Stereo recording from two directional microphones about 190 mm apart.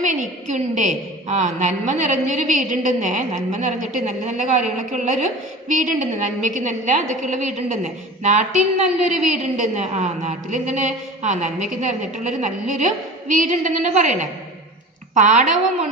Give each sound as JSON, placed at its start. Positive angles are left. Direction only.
{"t": 0.0, "sound": "a woman's voice", "side_deg": -40}
{"t": 9.1, "sound": "a woman's voice", "side_deg": 0}
{"t": 9.6, "sound": "a woman's voice", "side_deg": -35}